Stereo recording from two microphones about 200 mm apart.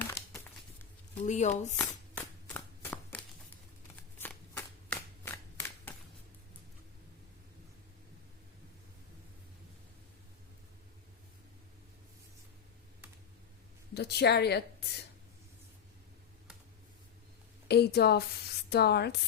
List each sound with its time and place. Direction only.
0.0 s crumpling: 10° left (ahead or behind)
1.2 s speech: 35° left (ahead or behind)
1.7 s a sound: 10° left (ahead or behind)
4.2 s shuffling cards: 10° left (ahead or behind)
13.9 s speech: 55° left (ahead or behind)
17.7 s a woman's voice: 55° left (ahead or behind)